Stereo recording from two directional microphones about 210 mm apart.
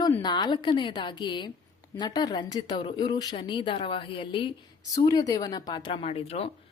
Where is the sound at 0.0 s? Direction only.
20° left (ahead or behind).